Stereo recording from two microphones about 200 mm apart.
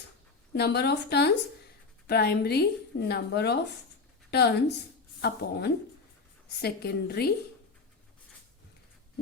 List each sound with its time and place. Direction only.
0.5 s a woman's voice: 55° left (ahead or behind)